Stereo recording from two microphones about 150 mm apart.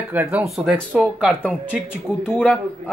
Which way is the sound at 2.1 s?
15° left (ahead or behind).